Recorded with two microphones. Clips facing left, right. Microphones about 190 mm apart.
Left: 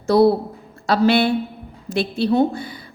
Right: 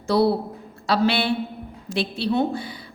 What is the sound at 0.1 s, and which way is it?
A woman's voice, 45° left (ahead or behind).